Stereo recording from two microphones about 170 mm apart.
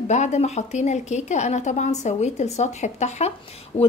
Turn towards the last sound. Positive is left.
turn(degrees=35)  # may be behind; listen again after turning